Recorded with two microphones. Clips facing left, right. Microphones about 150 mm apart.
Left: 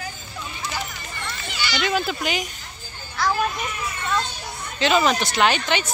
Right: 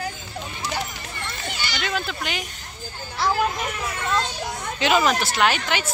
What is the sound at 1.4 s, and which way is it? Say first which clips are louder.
Children playing: left 2 dB; 50° right (ahead or behind).